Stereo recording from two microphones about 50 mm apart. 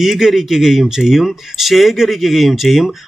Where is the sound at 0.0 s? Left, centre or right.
Centre.